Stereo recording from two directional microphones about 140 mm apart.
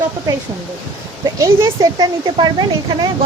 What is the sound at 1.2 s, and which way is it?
Speech, 20° right (ahead or behind).